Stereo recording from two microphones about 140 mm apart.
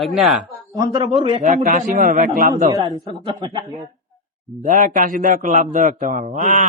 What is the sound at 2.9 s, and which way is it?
Speech, 30° right (ahead or behind).